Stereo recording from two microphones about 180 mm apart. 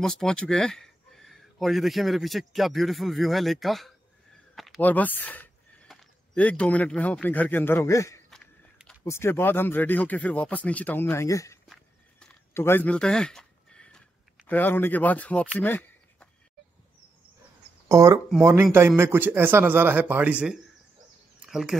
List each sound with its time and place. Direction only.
0.0 s speech: 5° left (ahead or behind)
8.3 s a sound: 5° left (ahead or behind)
9.0 s speech: 15° left (ahead or behind)
11.7 s a sound: 5° left (ahead or behind)
17.8 s a man's voice: 15° right (ahead or behind)
21.4 s bird: centre (ahead or behind)